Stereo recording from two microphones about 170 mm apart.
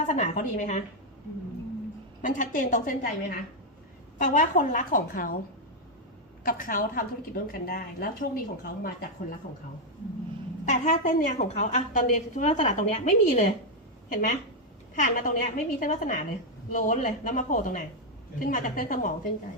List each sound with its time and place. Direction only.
0.1 s a woman's voice: 50° left (ahead or behind)
2.2 s a woman's voice: 50° left (ahead or behind)
6.4 s a woman's voice: 55° left (ahead or behind)
10.7 s a woman's voice: 45° left (ahead or behind)